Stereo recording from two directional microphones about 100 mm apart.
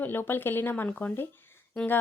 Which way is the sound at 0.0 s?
20° left (ahead or behind).